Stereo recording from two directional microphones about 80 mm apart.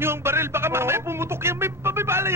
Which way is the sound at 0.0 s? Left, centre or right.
Right.